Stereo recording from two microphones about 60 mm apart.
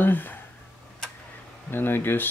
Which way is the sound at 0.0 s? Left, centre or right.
Left.